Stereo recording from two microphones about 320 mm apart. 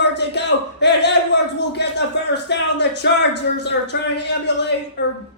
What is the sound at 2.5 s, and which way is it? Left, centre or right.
Music, left.